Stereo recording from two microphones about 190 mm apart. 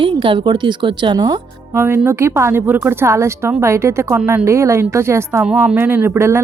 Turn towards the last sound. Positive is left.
turn(degrees=-15)  # may be behind; listen again after turning